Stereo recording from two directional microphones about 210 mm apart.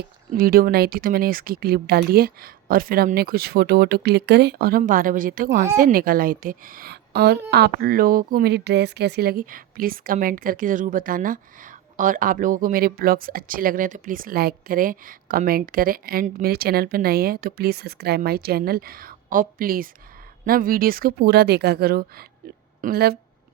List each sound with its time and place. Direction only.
0.3 s a woman's voice: 45° right (ahead or behind)